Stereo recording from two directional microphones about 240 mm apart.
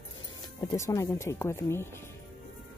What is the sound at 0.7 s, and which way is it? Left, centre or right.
Speech, centre.